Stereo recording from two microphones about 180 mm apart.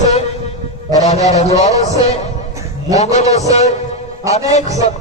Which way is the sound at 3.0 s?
40° left (ahead or behind).